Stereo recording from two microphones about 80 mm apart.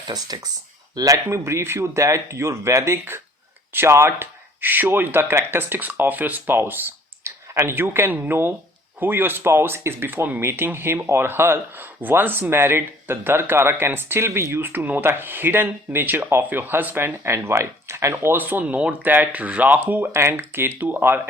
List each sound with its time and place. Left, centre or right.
0.1 s speech: right
0.9 s a man's voice: right